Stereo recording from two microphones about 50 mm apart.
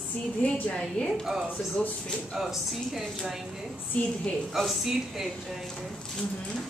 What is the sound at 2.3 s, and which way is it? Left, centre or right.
Speech, centre.